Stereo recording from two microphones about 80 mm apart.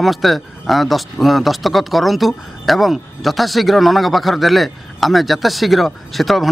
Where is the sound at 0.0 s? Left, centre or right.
Centre.